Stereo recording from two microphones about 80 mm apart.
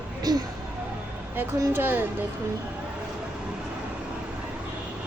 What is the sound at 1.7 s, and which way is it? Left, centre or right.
Speech, right.